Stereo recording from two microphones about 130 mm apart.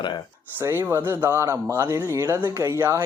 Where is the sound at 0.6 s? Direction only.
20° right (ahead or behind).